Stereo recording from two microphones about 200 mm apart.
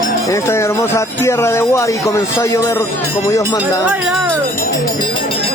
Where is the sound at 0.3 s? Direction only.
15° left (ahead or behind).